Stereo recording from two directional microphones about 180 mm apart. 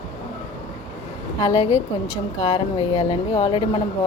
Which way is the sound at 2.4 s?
20° left (ahead or behind).